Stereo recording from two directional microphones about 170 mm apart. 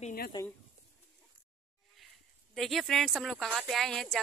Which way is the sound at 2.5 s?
Centre (ahead or behind).